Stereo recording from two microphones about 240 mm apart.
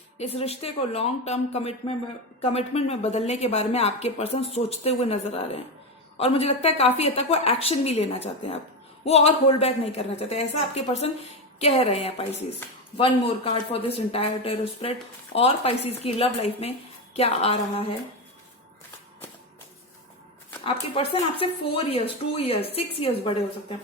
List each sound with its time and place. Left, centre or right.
0.2 s speech: left
20.7 s speech: left